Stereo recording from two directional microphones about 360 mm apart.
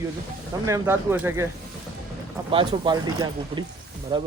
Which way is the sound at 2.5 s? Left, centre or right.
Centre.